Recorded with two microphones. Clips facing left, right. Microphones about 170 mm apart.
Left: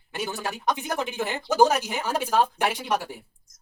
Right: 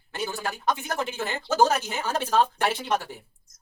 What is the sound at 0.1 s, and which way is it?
Speech, 15° left (ahead or behind).